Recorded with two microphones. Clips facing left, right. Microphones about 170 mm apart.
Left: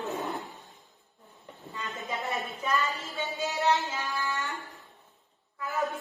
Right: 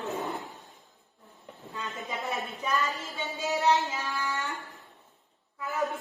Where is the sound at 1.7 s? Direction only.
Centre (ahead or behind).